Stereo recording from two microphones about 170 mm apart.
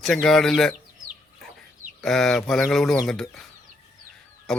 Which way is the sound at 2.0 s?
Centre (ahead or behind).